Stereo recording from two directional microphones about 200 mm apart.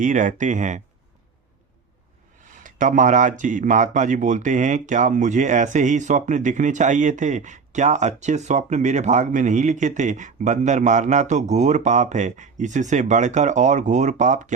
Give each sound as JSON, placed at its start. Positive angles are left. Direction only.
{"t": 0.0, "sound": "speech", "side_deg": -40}
{"t": 2.5, "sound": "speech", "side_deg": -40}